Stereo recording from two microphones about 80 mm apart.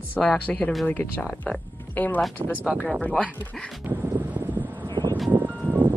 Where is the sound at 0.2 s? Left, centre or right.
Centre.